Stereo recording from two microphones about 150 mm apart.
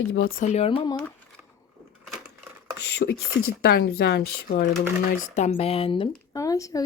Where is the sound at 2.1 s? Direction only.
5° right (ahead or behind).